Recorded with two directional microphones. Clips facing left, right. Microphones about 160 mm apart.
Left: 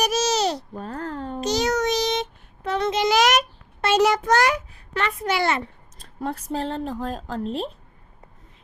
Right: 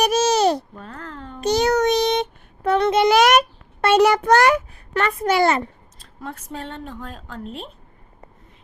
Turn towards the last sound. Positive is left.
turn(degrees=35)  # may be behind; listen again after turning